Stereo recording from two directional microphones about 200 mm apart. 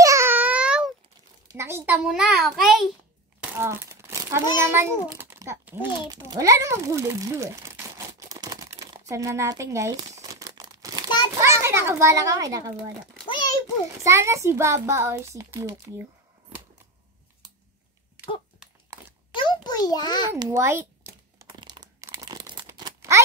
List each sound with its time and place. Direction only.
0.0 s babbling: 15° right (ahead or behind)
1.6 s a child's voice: 10° right (ahead or behind)
3.5 s crumpling: 10° right (ahead or behind)
4.6 s a child's voice: 10° right (ahead or behind)
8.3 s crumpling: 20° right (ahead or behind)
11.4 s a child's voice: 15° right (ahead or behind)
13.3 s a sound: 20° left (ahead or behind)
14.0 s a child's voice: 15° right (ahead or behind)
18.6 s a sound: 5° right (ahead or behind)
19.3 s a sound: 20° left (ahead or behind)
20.3 s a sound: 15° right (ahead or behind)
21.5 s crunch: 20° right (ahead or behind)